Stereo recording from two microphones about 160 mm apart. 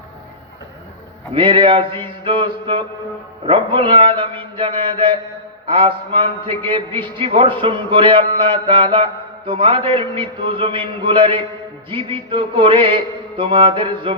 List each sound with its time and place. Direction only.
1.3 s mantra: 30° right (ahead or behind)